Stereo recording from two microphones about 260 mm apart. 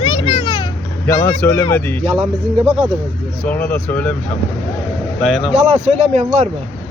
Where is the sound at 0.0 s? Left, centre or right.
Left.